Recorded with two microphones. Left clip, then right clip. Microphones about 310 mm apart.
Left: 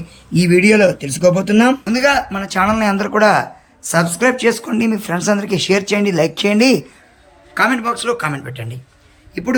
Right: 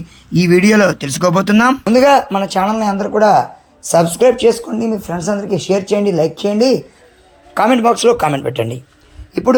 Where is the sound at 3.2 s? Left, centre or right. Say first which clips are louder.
Right 3 dB; centre.